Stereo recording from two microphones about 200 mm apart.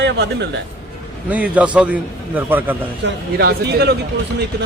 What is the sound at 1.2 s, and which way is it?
A man's voice, 5° right (ahead or behind).